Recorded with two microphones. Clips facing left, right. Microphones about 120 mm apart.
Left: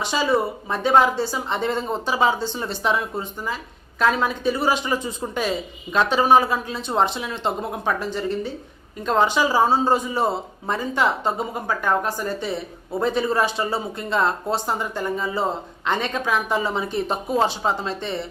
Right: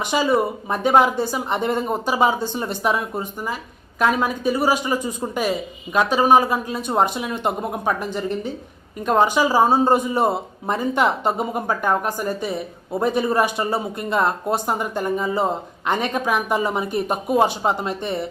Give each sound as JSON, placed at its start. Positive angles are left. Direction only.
{"t": 0.0, "sound": "a woman's voice", "side_deg": -15}